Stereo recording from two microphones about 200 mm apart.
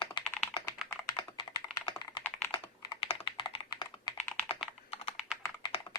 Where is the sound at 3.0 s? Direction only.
25° left (ahead or behind).